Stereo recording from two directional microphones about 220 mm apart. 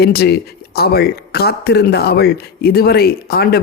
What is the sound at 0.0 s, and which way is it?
Speech, 45° left (ahead or behind).